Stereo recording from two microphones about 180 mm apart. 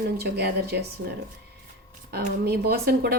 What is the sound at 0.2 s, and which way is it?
Speech, 65° right (ahead or behind).